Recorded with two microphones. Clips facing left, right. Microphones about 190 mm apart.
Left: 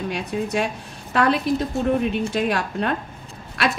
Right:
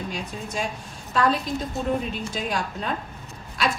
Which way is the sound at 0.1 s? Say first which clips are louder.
Left 7 dB; 65° left (ahead or behind).